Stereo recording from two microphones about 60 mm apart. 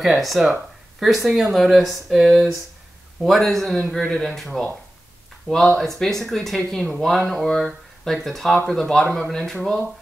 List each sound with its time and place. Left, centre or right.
0.0 s speech: centre
5.5 s speech: left
5.8 s speech: centre